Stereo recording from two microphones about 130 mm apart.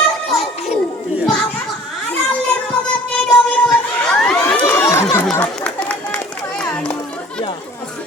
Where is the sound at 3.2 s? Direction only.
5° left (ahead or behind).